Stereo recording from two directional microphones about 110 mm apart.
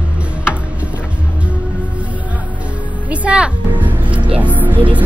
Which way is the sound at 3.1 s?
10° right (ahead or behind).